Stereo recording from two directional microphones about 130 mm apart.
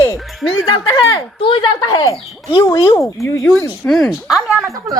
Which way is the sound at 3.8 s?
5° left (ahead or behind).